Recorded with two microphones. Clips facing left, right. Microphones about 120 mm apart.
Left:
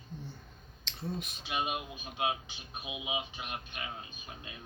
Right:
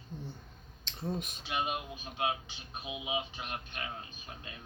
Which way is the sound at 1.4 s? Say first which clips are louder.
Left 3 dB; 20° left (ahead or behind).